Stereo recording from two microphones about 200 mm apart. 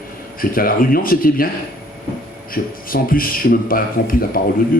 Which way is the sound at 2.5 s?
45° left (ahead or behind).